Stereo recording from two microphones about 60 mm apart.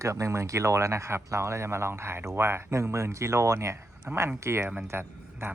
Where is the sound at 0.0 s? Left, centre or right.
Right.